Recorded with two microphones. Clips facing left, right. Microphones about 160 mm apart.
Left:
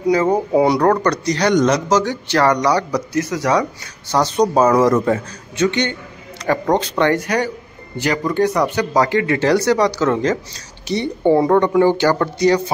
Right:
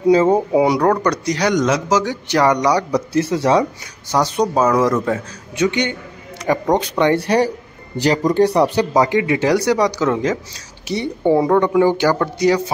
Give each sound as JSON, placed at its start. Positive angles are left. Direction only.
{"t": 0.0, "sound": "speech", "side_deg": -25}
{"t": 0.5, "sound": "speech", "side_deg": -10}
{"t": 3.1, "sound": "speech", "side_deg": -30}
{"t": 4.1, "sound": "speech", "side_deg": -10}
{"t": 5.6, "sound": "speech", "side_deg": -10}
{"t": 7.2, "sound": "speech", "side_deg": -35}
{"t": 9.0, "sound": "speech", "side_deg": -15}